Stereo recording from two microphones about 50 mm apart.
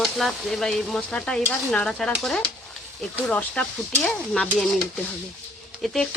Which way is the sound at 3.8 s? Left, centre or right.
Centre.